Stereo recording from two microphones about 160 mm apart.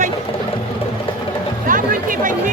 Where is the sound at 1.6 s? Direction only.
55° right (ahead or behind).